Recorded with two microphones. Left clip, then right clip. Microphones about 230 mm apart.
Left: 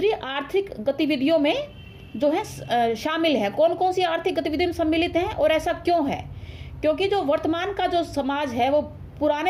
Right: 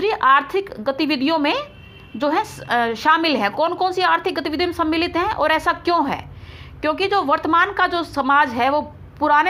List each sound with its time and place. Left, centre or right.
0.0 s a woman's voice: centre